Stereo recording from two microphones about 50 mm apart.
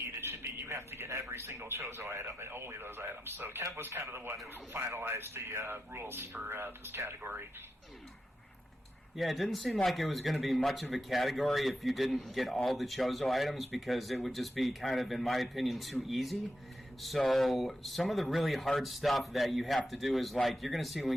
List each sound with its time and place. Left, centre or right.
0.2 s a sound: right
1.3 s speech: right
5.7 s speech: right
7.2 s speech: right
9.1 s a man's voice: centre